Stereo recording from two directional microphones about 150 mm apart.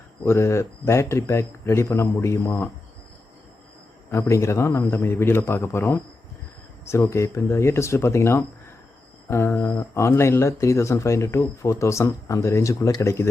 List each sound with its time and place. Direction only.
0.3 s speech: 20° left (ahead or behind)
4.1 s speech: 20° left (ahead or behind)